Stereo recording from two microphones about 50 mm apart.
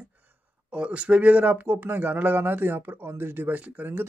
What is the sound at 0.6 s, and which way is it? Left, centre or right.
Speech, right.